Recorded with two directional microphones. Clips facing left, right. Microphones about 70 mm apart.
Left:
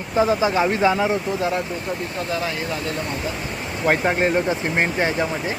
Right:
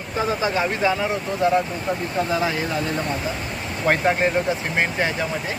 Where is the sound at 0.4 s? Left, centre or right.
Centre.